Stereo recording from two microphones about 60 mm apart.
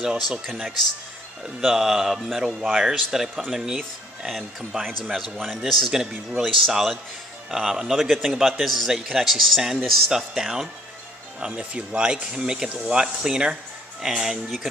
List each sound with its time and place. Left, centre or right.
1.6 s speech: centre